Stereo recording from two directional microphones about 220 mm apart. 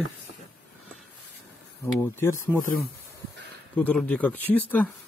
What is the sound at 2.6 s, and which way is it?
Speech, 40° left (ahead or behind).